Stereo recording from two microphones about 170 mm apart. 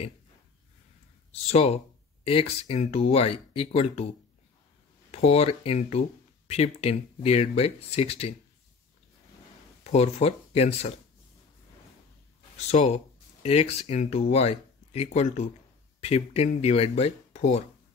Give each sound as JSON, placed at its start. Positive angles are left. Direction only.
{"t": 1.3, "sound": "speech", "side_deg": 35}
{"t": 5.1, "sound": "speech", "side_deg": 40}
{"t": 9.9, "sound": "speech", "side_deg": 40}
{"t": 12.5, "sound": "speech", "side_deg": 40}